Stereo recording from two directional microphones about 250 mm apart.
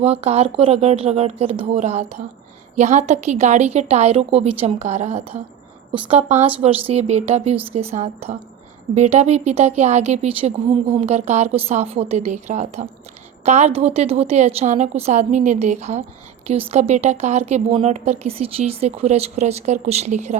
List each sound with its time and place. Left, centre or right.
0.0 s a woman's voice: right